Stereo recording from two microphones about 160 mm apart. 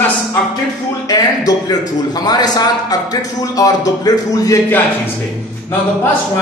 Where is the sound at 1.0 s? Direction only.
25° left (ahead or behind).